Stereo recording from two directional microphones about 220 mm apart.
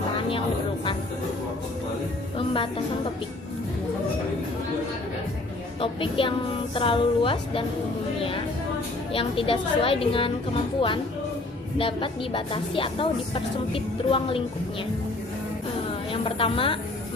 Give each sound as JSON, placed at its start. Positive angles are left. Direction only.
{"t": 2.5, "sound": "a woman's voice", "side_deg": 25}
{"t": 5.8, "sound": "a woman's voice", "side_deg": 25}
{"t": 9.1, "sound": "a woman's voice", "side_deg": 25}
{"t": 16.1, "sound": "a woman's voice", "side_deg": 25}